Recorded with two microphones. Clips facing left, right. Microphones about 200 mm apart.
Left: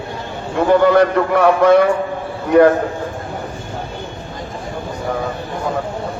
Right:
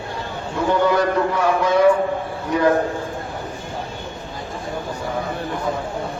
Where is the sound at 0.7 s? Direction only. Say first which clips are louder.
Left 6 dB; 60° left (ahead or behind).